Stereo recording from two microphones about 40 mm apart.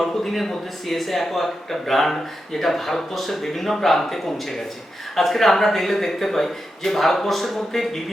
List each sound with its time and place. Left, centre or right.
0.0 s a man's voice: centre